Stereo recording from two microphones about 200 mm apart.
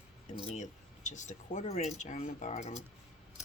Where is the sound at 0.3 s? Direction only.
35° left (ahead or behind).